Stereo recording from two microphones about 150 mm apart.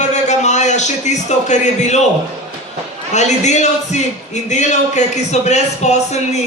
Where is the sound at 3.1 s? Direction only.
50° left (ahead or behind).